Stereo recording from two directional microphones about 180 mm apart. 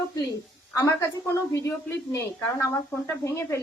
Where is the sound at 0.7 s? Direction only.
15° left (ahead or behind).